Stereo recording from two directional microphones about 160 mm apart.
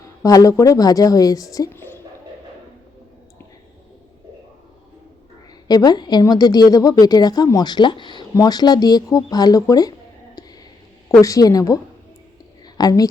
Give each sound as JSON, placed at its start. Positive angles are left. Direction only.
{"t": 0.2, "sound": "a woman's voice", "side_deg": 20}
{"t": 5.6, "sound": "a woman's voice", "side_deg": 25}
{"t": 11.2, "sound": "a woman's voice", "side_deg": 20}
{"t": 12.6, "sound": "a sound", "side_deg": 25}